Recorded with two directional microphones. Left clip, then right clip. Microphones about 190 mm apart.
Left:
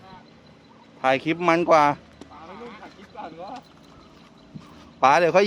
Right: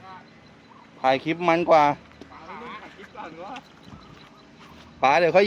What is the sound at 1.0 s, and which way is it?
Speech, 5° left (ahead or behind).